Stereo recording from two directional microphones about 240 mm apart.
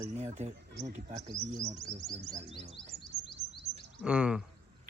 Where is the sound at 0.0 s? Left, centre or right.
Right.